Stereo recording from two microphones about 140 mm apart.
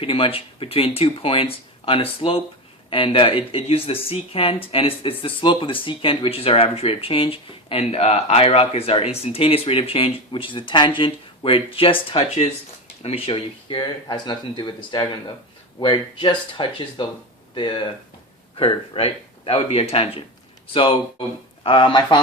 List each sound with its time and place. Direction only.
0.0 s speech: 40° left (ahead or behind)